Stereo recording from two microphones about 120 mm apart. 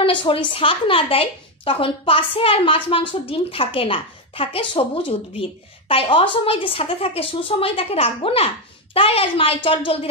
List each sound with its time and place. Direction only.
0.0 s a woman's voice: 45° left (ahead or behind)